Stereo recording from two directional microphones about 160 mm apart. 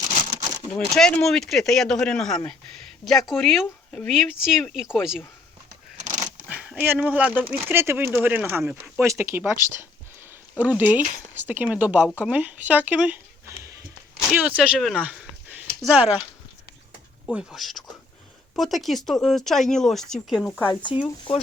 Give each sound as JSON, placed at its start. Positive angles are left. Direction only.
{"t": 0.1, "sound": "a sound", "side_deg": -50}
{"t": 0.7, "sound": "speech", "side_deg": 5}
{"t": 6.0, "sound": "a sound", "side_deg": -50}
{"t": 6.5, "sound": "speech", "side_deg": -10}
{"t": 10.6, "sound": "speech", "side_deg": -10}
{"t": 14.3, "sound": "speech", "side_deg": -10}
{"t": 17.2, "sound": "speech", "side_deg": 0}
{"t": 20.7, "sound": "speech", "side_deg": 30}